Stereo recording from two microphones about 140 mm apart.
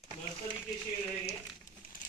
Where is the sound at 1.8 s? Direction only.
90° left.